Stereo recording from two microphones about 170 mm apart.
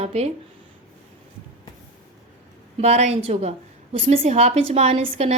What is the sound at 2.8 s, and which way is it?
Speech, 40° right (ahead or behind).